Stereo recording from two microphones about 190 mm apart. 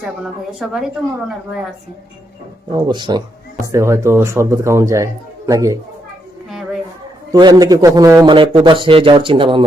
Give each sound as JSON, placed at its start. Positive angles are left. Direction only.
{"t": 0.6, "sound": "speech", "side_deg": 0}
{"t": 2.7, "sound": "a man's voice", "side_deg": -20}
{"t": 7.3, "sound": "a man's voice", "side_deg": -20}